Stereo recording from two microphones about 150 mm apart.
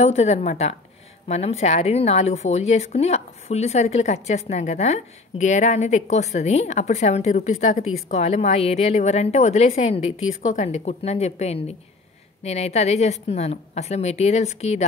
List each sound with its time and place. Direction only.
0.0 s a woman's voice: 45° left (ahead or behind)